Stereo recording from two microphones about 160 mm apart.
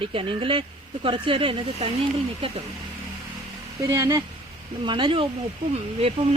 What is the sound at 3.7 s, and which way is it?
Speech, 20° right (ahead or behind).